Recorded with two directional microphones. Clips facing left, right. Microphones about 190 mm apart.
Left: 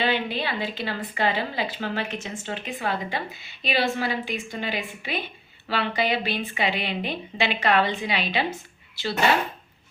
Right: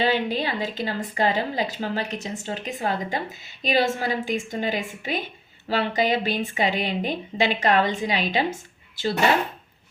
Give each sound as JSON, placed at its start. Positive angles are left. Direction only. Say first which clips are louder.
{"t": 0.0, "sound": "a woman's voice", "louder": "right 3 dB", "side_deg": -40}